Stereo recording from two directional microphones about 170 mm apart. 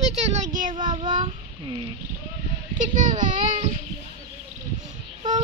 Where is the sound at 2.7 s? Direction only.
50° right (ahead or behind).